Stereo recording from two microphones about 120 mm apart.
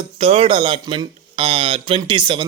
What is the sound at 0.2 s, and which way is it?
Speech, 50° right (ahead or behind).